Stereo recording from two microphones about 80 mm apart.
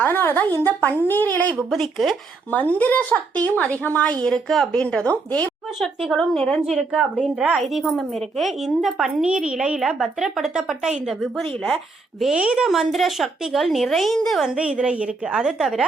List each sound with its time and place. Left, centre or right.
0.0 s speech: left
1.5 s a woman's voice: centre
2.5 s a woman's voice: centre
6.0 s a woman's voice: centre
6.6 s a woman's voice: centre
12.2 s a woman's voice: centre